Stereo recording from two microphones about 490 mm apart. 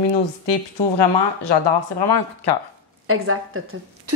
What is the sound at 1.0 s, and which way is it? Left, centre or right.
A woman's voice, left.